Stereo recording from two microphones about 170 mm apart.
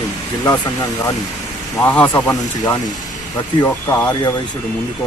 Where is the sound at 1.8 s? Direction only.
10° left (ahead or behind).